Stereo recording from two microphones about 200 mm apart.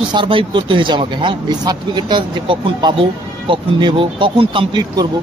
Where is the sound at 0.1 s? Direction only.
25° right (ahead or behind).